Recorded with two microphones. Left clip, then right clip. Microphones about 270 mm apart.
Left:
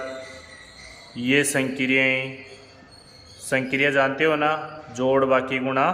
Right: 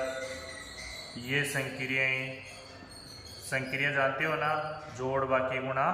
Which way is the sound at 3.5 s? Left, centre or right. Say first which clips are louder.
Left 9 dB; left.